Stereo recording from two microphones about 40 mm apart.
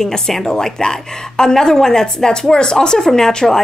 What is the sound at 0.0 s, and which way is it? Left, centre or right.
A woman's voice, centre.